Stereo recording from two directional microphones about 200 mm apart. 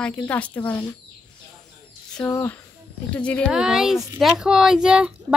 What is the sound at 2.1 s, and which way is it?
Speech, 10° left (ahead or behind).